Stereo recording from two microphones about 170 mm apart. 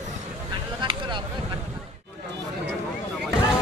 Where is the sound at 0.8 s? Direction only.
30° right (ahead or behind).